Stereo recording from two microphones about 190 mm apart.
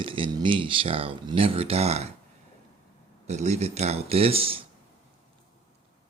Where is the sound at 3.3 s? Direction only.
35° right (ahead or behind).